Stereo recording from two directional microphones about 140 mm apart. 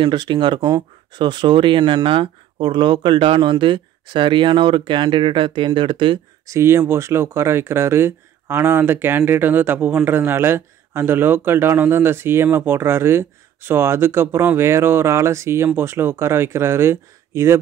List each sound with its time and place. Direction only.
0.0 s speech: 35° right (ahead or behind)
6.4 s speech: 20° right (ahead or behind)